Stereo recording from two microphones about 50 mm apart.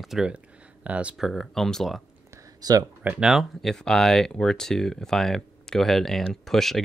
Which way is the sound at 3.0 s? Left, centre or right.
Right.